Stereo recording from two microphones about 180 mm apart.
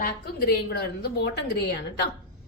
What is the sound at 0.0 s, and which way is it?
A woman's voice, 60° left (ahead or behind).